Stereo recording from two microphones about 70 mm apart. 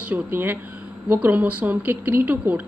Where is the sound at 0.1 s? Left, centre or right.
Right.